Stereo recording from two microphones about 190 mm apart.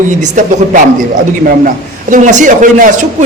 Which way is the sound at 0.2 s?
40° right (ahead or behind).